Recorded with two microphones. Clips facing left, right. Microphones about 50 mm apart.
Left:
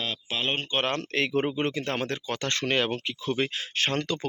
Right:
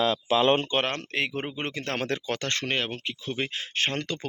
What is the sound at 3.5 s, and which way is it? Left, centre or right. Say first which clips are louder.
Speech: left 1 dB; right.